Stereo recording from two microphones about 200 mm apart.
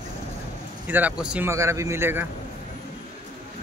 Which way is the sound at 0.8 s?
10° right (ahead or behind).